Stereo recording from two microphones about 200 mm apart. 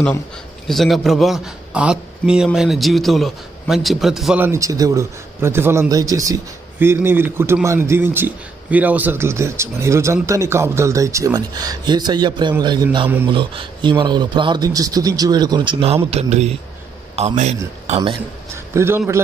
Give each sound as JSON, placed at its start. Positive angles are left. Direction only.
{"t": 0.7, "sound": "a man's voice", "side_deg": 0}
{"t": 18.7, "sound": "a man's voice", "side_deg": -10}